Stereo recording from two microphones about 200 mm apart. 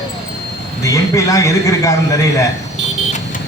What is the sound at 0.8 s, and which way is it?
A man's voice, 15° left (ahead or behind).